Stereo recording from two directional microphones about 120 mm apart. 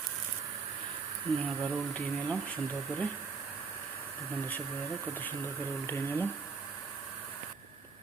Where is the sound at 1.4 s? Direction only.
10° left (ahead or behind).